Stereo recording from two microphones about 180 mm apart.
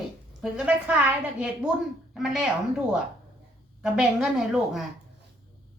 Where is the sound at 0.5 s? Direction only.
5° right (ahead or behind).